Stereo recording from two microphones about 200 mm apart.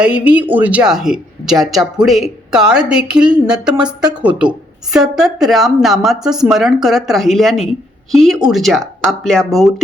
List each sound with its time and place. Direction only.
0.0 s speech: 5° right (ahead or behind)